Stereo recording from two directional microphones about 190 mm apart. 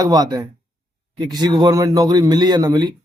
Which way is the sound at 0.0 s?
20° right (ahead or behind).